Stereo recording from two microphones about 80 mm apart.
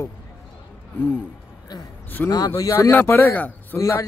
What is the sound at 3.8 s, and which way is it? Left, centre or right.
Speech, left.